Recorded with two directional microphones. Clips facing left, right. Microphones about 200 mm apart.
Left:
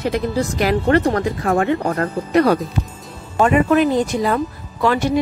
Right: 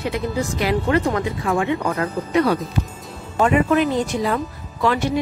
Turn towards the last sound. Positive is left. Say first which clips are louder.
# left 3 dB
turn(degrees=45)  # may be behind; listen again after turning